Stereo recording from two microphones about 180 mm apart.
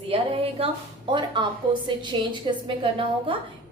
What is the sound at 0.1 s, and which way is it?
A woman's voice, 30° right (ahead or behind).